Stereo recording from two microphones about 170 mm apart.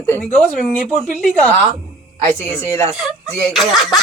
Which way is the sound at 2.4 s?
15° left (ahead or behind).